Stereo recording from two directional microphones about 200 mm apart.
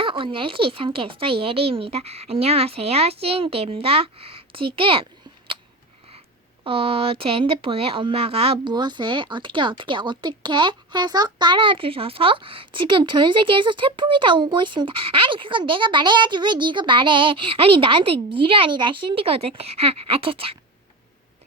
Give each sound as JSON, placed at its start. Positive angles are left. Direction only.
{"t": 0.0, "sound": "speech", "side_deg": -25}
{"t": 6.7, "sound": "speech", "side_deg": -30}